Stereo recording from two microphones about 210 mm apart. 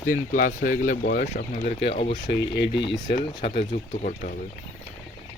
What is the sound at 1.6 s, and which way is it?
Speech, 30° left (ahead or behind).